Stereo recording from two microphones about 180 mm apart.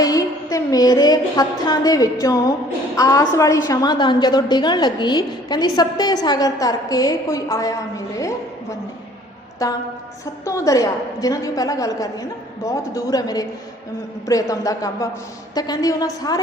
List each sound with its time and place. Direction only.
0.0 s a sound: 20° left (ahead or behind)
2.9 s a woman's voice: 20° left (ahead or behind)
9.6 s a woman's voice: 20° left (ahead or behind)